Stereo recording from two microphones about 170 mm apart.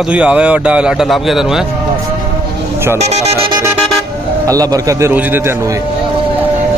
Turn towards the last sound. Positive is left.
turn(degrees=-15)  # may be behind; listen again after turning